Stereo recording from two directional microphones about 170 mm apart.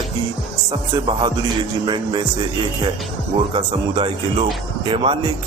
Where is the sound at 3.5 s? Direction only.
30° right (ahead or behind).